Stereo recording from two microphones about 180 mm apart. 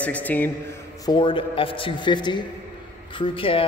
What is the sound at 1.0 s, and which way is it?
A man's voice, 25° left (ahead or behind).